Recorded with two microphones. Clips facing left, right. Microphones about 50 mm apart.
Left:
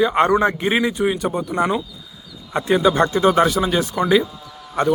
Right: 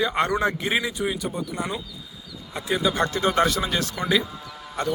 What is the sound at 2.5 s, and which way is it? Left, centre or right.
Speech, left.